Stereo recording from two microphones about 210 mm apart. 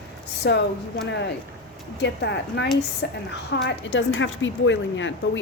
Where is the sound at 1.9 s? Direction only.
55° left (ahead or behind).